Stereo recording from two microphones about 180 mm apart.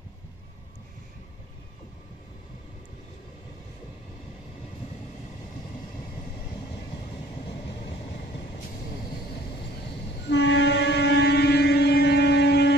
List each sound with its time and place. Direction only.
10.3 s train: 80° left